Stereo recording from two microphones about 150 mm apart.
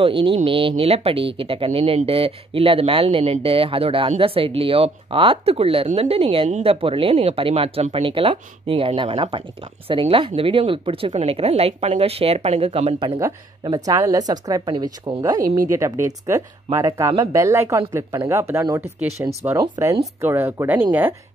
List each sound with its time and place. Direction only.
0.0 s speech: 35° right (ahead or behind)
13.8 s speech: 25° right (ahead or behind)